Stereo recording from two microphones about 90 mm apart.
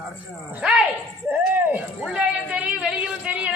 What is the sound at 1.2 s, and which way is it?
Speech, 20° right (ahead or behind).